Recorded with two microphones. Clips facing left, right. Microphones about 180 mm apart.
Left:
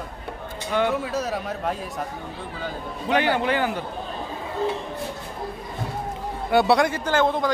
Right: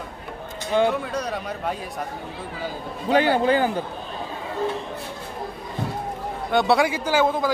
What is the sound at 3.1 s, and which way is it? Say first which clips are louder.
Speech: right 3 dB; 35° right (ahead or behind).